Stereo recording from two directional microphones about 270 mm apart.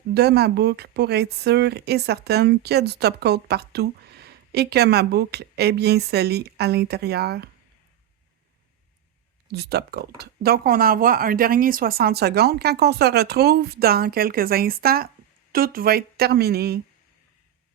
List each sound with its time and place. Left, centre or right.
0.1 s speech: right
9.5 s speech: right